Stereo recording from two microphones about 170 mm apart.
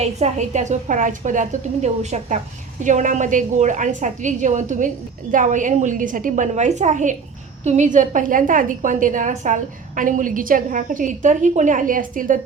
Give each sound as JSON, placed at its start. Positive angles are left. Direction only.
{"t": 0.0, "sound": "a woman's voice", "side_deg": -45}